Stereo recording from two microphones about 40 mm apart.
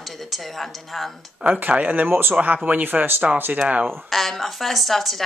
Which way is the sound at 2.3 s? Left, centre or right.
Right.